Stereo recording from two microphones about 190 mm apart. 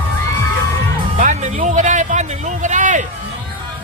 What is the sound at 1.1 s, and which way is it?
Music, 40° right (ahead or behind).